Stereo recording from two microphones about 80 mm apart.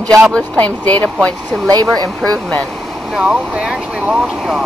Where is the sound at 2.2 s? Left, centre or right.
Centre.